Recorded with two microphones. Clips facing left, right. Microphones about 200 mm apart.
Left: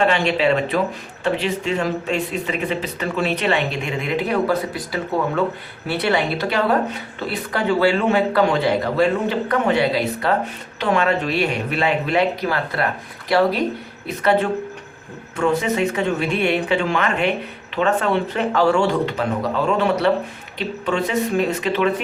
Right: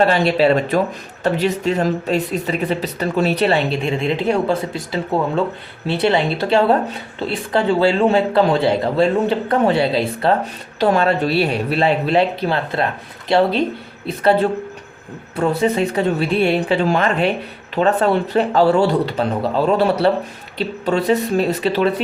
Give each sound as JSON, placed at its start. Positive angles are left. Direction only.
{"t": 0.0, "sound": "a man's voice", "side_deg": -35}